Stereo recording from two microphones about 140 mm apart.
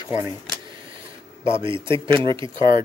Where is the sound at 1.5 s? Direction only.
35° right (ahead or behind).